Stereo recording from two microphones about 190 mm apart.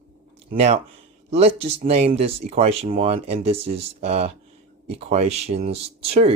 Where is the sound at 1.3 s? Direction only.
35° right (ahead or behind).